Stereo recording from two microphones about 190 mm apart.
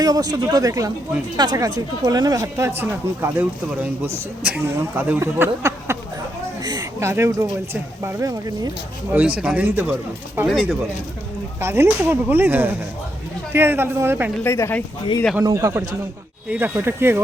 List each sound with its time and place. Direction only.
0.0 s speech: 20° right (ahead or behind)
9.1 s speech: 5° right (ahead or behind)
14.4 s speech: 15° left (ahead or behind)
15.4 s speech: 15° right (ahead or behind)